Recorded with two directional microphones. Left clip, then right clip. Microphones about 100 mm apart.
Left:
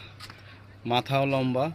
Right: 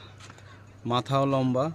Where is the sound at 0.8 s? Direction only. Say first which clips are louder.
Even; 50° right (ahead or behind).